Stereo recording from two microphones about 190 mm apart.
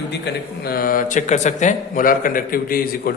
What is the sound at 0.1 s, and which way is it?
Speech, 60° left (ahead or behind).